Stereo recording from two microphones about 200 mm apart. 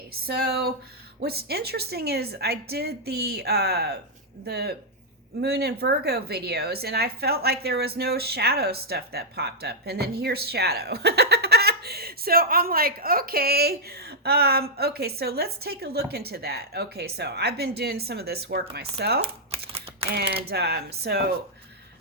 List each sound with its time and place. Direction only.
0.1 s a woman's voice: 50° right (ahead or behind)
19.2 s shuffling cards: 30° right (ahead or behind)
20.1 s a woman's voice: 50° right (ahead or behind)